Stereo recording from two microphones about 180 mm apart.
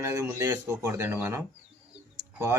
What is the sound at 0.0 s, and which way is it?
Speech, 20° right (ahead or behind).